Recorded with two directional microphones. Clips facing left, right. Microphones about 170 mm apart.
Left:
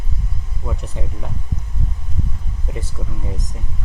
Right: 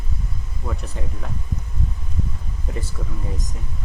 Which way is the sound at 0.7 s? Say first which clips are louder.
Left 2 dB; 20° left (ahead or behind).